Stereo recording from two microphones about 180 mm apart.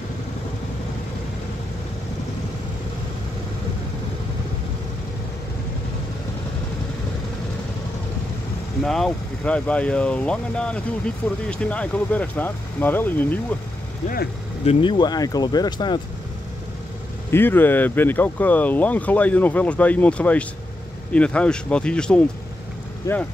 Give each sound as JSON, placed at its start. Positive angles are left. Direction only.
{"t": 8.8, "sound": "speech", "side_deg": 0}
{"t": 14.0, "sound": "speech", "side_deg": 55}
{"t": 14.6, "sound": "speech", "side_deg": 30}
{"t": 17.3, "sound": "speech", "side_deg": 10}
{"t": 23.0, "sound": "speech", "side_deg": 20}